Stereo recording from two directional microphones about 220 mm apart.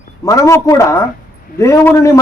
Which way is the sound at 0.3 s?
15° left (ahead or behind).